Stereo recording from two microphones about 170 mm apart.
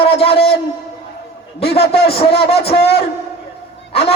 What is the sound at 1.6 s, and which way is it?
Speech, 35° left (ahead or behind).